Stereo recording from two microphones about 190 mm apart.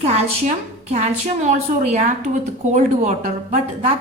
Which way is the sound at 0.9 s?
35° right (ahead or behind).